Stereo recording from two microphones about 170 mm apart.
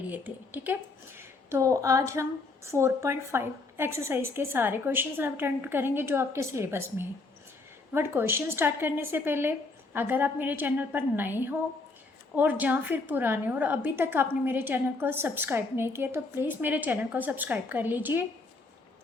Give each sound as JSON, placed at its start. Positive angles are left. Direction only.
{"t": 0.1, "sound": "a woman's voice", "side_deg": -10}